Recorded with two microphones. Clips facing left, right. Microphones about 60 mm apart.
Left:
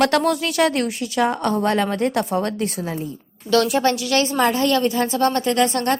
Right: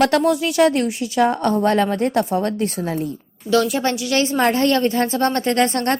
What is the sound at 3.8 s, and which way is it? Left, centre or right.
Speech, centre.